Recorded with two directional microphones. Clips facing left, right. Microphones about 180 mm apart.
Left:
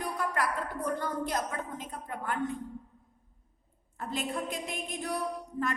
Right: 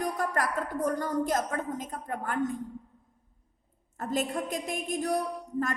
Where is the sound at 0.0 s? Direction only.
45° right (ahead or behind).